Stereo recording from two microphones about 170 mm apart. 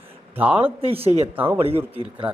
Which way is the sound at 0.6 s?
35° right (ahead or behind).